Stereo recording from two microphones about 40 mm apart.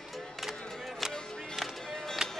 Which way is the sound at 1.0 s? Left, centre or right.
Centre.